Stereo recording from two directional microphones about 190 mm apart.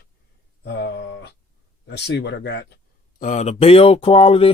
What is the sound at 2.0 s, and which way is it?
Speech, 60° left (ahead or behind).